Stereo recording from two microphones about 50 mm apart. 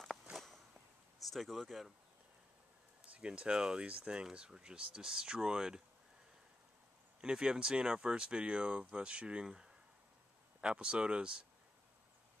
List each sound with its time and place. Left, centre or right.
1.2 s speech: centre
3.2 s speech: centre
7.2 s speech: centre